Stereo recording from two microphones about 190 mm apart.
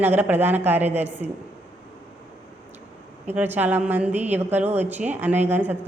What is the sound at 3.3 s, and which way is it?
A woman's voice, 10° right (ahead or behind).